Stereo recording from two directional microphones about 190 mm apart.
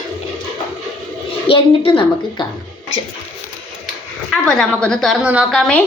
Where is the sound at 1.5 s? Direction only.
30° left (ahead or behind).